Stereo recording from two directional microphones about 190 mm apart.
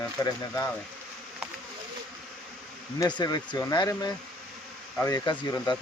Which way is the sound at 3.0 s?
20° left (ahead or behind).